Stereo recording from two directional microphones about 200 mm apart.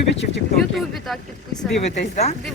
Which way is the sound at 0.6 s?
Centre (ahead or behind).